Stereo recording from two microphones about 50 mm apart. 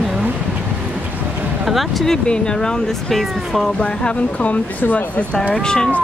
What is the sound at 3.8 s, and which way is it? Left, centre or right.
Speech, left.